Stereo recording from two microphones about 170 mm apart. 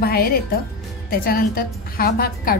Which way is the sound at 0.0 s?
65° left (ahead or behind).